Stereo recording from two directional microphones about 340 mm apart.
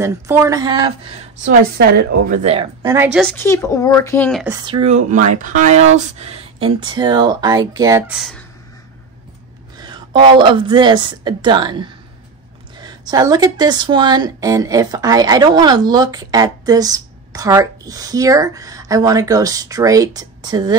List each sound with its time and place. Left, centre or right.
0.0 s speech: centre
1.4 s a woman's voice: right; by 4.6 s centre
4.6 s speech: centre
9.8 s speech: centre